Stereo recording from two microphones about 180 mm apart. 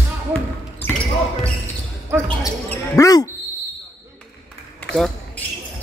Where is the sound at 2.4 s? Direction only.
15° left (ahead or behind).